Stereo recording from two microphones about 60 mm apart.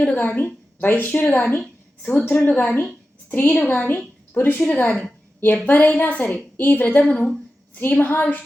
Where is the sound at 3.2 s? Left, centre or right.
Left.